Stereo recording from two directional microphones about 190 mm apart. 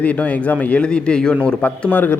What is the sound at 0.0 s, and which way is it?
A man's voice, 5° left (ahead or behind).